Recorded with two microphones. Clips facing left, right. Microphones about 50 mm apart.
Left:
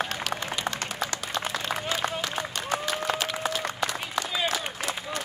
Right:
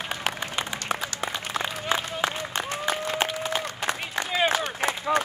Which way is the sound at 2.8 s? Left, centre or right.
Right.